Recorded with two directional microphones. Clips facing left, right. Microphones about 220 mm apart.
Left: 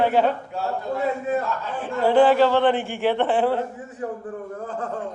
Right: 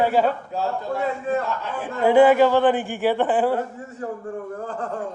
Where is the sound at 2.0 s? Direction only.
15° right (ahead or behind).